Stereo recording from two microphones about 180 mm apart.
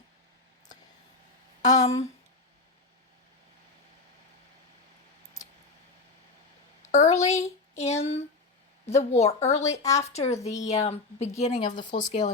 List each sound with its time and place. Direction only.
1.7 s a woman's voice: 35° left (ahead or behind)
6.8 s a woman's voice: 40° left (ahead or behind)